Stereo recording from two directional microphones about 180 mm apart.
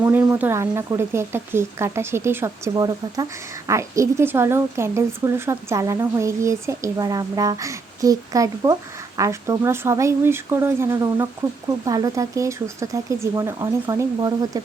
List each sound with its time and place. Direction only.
0.0 s a woman's voice: 10° right (ahead or behind)